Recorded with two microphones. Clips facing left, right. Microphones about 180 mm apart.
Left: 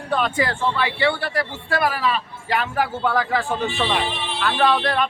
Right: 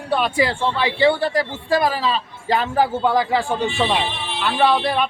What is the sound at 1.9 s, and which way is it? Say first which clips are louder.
A man's voice: right 1 dB; 30° right (ahead or behind).